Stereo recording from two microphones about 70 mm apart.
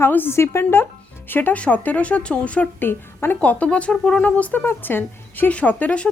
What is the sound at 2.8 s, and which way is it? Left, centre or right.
Speech, left.